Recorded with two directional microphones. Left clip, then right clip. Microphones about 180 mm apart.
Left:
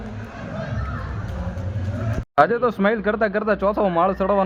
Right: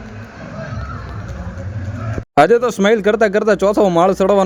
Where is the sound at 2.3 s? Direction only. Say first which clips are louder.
Right 6 dB; 35° right (ahead or behind).